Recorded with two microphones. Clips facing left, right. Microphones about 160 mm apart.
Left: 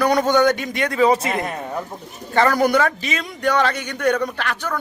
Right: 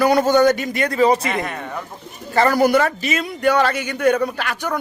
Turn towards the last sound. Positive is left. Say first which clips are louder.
# right 1 dB
turn(degrees=-10)  # may be behind; listen again after turning